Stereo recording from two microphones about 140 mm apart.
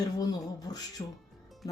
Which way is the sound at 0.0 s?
25° left (ahead or behind).